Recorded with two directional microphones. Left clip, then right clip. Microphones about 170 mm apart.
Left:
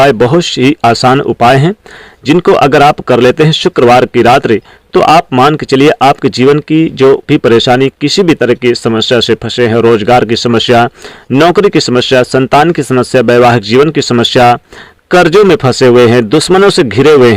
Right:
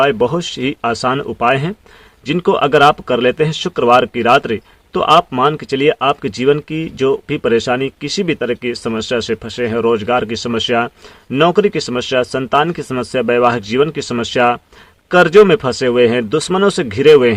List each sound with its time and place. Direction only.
0.0 s speech: 45° left (ahead or behind)